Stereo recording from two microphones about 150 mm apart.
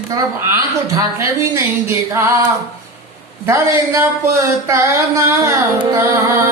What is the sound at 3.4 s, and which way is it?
Speech, 15° right (ahead or behind).